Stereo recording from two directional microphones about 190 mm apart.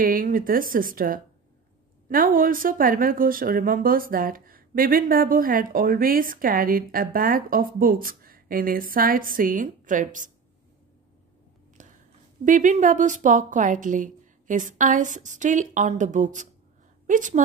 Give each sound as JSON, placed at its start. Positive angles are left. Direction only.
{"t": 0.0, "sound": "speech", "side_deg": -50}
{"t": 11.8, "sound": "whispering", "side_deg": -40}
{"t": 12.4, "sound": "a woman's voice", "side_deg": -40}